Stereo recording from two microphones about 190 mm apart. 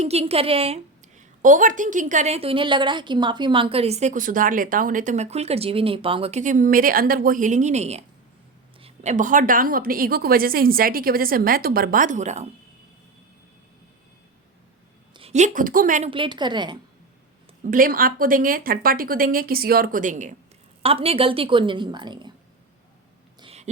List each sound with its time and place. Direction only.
0.0 s a woman's voice: 35° right (ahead or behind)
15.1 s a woman's voice: 35° right (ahead or behind)
16.0 s a woman's voice: 25° right (ahead or behind)
17.7 s a woman's voice: 45° right (ahead or behind)
20.8 s a woman's voice: 30° right (ahead or behind)
23.4 s a sound: 35° right (ahead or behind)